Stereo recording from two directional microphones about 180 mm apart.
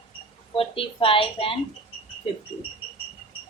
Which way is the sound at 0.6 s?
30° left (ahead or behind).